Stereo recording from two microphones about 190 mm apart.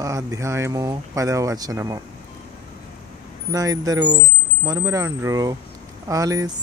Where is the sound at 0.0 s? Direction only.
15° right (ahead or behind).